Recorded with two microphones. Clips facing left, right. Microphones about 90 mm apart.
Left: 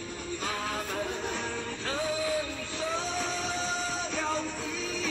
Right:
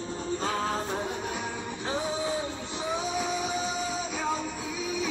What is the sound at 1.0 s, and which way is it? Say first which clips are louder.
Music: right 1 dB; 10° right (ahead or behind).